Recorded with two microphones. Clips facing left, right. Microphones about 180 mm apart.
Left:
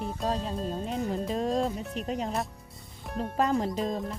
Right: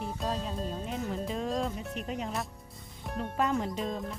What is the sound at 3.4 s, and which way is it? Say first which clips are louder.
Speech: left 3 dB; 35° left (ahead or behind).